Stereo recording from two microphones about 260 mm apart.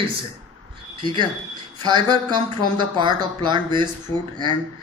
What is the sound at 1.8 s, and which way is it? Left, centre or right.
Speech, centre.